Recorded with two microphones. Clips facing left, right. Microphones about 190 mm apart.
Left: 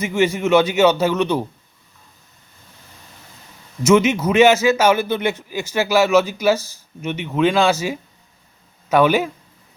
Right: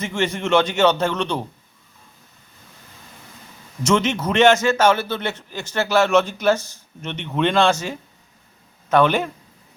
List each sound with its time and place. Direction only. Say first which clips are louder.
0.0 s a man's voice: left 5 dB; 10° left (ahead or behind)
3.8 s a man's voice: left 5 dB; 10° left (ahead or behind)